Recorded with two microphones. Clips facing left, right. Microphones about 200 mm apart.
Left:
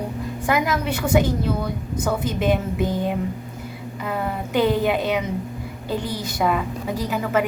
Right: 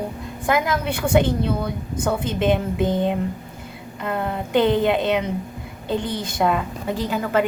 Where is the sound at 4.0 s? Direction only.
5° left (ahead or behind).